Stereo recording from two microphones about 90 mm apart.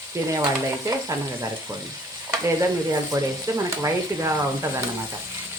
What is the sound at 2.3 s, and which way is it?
Frying, 40° right (ahead or behind).